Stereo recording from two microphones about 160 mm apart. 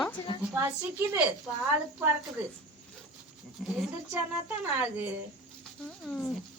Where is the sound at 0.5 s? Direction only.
15° right (ahead or behind).